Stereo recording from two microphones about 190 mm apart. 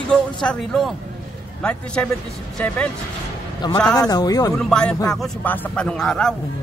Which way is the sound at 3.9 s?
20° left (ahead or behind).